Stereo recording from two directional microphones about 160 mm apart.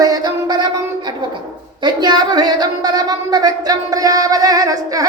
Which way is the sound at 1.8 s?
25° right (ahead or behind).